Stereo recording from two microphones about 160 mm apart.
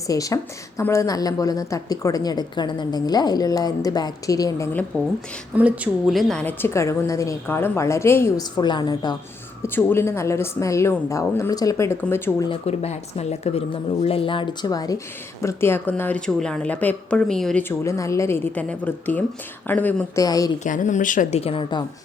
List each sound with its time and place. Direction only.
0.1 s a woman's voice: 20° left (ahead or behind)
5.5 s a woman's voice: 10° right (ahead or behind)
6.4 s speech: 15° left (ahead or behind)
8.5 s a woman's voice: 30° left (ahead or behind)
9.6 s speech: 15° left (ahead or behind)
12.5 s speech: 40° left (ahead or behind); by 20.1 s 10° left (ahead or behind)
20.1 s a woman's voice: 20° left (ahead or behind)
20.7 s a woman's voice: 50° left (ahead or behind); by 21.8 s 30° left (ahead or behind)